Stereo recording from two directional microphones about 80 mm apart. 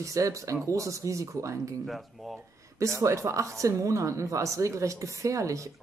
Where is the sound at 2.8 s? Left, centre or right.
Right.